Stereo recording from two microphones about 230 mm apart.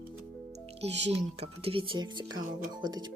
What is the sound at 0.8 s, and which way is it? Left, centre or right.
Speech, right.